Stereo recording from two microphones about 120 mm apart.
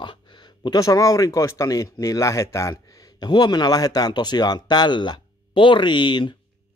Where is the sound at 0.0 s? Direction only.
40° left (ahead or behind).